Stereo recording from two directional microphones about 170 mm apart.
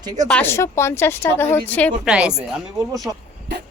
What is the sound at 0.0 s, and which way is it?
Speech, 20° right (ahead or behind).